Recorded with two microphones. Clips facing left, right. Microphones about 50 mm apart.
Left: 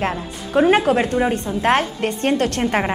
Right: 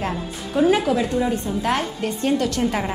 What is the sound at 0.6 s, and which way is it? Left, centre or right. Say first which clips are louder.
A woman's voice: left 3 dB; left.